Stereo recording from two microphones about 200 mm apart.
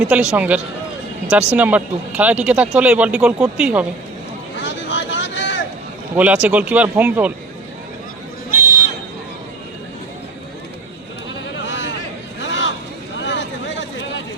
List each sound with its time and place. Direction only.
0.0 s speech: 5° right (ahead or behind)
4.5 s vehicle: 65° left (ahead or behind)
6.1 s speech: 5° right (ahead or behind)
11.5 s a sound: 65° left (ahead or behind)
13.1 s vehicle: 65° left (ahead or behind)